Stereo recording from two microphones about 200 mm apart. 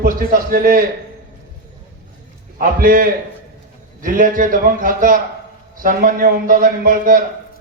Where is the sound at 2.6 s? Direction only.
45° right (ahead or behind).